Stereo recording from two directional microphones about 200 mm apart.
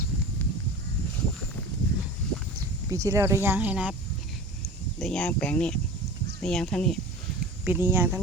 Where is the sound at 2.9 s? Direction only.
15° right (ahead or behind).